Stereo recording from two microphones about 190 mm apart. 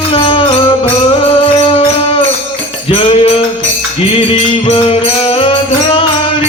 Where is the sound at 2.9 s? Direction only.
30° left (ahead or behind).